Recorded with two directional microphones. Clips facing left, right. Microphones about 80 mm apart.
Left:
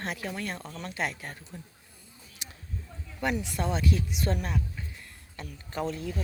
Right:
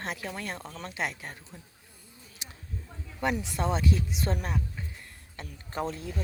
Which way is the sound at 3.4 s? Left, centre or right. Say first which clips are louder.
Right 1 dB; right.